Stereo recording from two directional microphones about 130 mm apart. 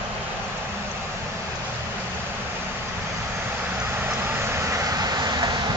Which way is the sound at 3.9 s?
15° right (ahead or behind).